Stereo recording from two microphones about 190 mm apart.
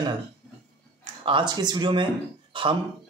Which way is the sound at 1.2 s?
25° right (ahead or behind).